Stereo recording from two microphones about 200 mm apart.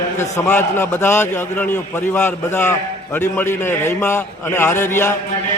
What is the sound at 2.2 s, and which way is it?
A man's voice, 10° left (ahead or behind).